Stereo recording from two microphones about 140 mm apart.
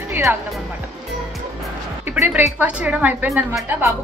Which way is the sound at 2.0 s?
15° right (ahead or behind).